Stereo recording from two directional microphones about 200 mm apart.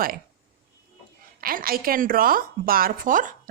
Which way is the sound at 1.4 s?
45° right (ahead or behind).